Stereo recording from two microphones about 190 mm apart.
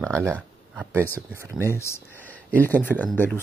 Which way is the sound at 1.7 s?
15° left (ahead or behind).